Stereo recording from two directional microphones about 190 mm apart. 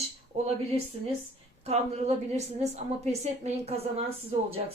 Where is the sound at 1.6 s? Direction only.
35° right (ahead or behind).